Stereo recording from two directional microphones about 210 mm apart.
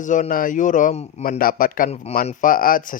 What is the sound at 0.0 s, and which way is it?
Speech, 35° left (ahead or behind).